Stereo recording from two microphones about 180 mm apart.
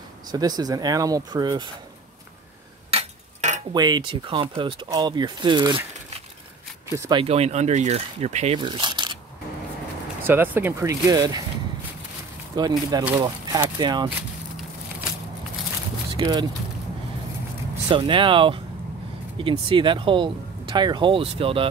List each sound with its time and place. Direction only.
0.3 s speech: 20° right (ahead or behind)
2.9 s clock: 40° right (ahead or behind)
3.7 s speech: 20° right (ahead or behind)
6.9 s speech: 15° right (ahead or behind)
7.2 s speech: 35° right (ahead or behind)
8.5 s speech: 25° right (ahead or behind)
10.2 s speech: 10° right (ahead or behind)
12.5 s speech: 20° right (ahead or behind)
16.1 s speech: 25° right (ahead or behind)
17.8 s speech: 30° right (ahead or behind)